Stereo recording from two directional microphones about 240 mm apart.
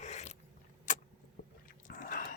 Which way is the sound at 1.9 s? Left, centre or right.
Left.